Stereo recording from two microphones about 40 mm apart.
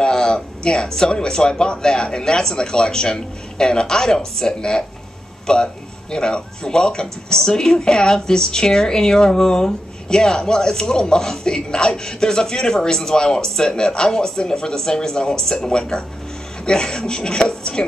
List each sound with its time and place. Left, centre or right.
0.0 s speech: centre